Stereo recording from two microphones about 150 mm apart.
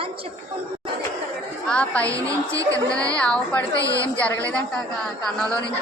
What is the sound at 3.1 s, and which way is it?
Speech, 5° left (ahead or behind).